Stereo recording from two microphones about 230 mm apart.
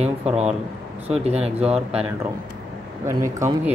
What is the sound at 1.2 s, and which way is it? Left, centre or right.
Speech, right.